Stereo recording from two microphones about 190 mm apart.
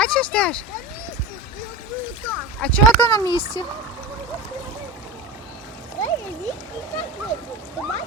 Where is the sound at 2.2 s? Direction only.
5° left (ahead or behind).